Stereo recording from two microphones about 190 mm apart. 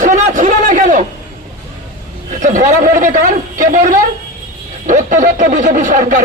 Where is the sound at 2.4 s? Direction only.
45° right (ahead or behind).